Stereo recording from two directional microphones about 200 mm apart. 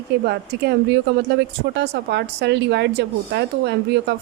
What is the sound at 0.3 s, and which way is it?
A woman's voice, 55° right (ahead or behind).